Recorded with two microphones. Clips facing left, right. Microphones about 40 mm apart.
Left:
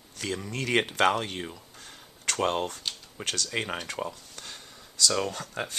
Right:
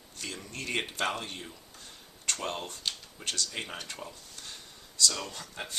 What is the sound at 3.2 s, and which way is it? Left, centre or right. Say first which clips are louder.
Speech: left 9 dB; left.